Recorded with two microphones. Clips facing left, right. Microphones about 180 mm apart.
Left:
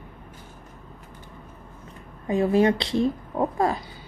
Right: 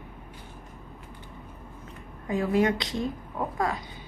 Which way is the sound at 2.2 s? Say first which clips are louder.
Left 4 dB; 25° left (ahead or behind).